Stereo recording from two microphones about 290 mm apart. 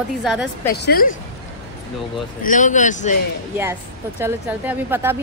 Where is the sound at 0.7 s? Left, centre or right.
Left.